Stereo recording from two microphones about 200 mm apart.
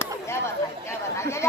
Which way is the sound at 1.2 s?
15° left (ahead or behind).